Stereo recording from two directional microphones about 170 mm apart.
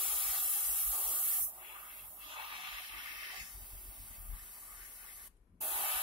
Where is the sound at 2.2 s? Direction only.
30° right (ahead or behind).